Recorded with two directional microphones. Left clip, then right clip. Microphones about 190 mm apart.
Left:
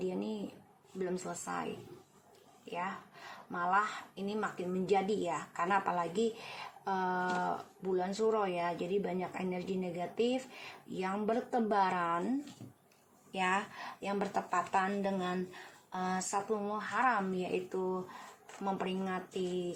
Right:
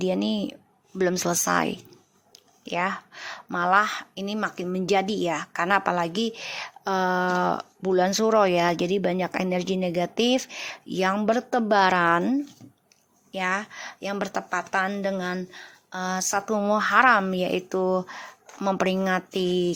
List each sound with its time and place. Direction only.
0.1 s speech: 60° right (ahead or behind)
13.3 s speech: 35° right (ahead or behind)
16.3 s speech: 50° right (ahead or behind)